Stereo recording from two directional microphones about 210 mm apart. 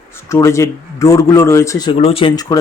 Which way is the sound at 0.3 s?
15° left (ahead or behind).